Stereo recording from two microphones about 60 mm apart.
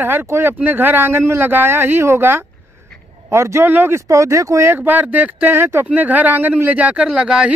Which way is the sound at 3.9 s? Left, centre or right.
Right.